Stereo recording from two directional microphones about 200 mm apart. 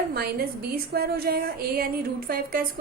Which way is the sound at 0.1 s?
50° right (ahead or behind).